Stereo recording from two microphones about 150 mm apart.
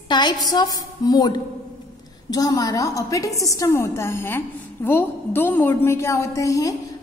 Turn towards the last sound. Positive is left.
turn(degrees=20)  # may be behind; listen again after turning